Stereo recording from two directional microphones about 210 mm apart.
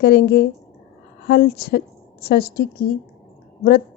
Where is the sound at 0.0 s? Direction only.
50° left (ahead or behind).